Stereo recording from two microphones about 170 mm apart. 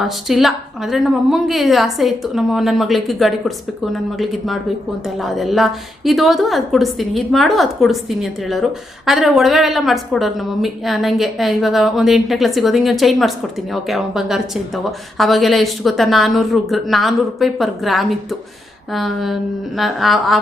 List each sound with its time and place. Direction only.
0.0 s a woman's voice: centre (ahead or behind)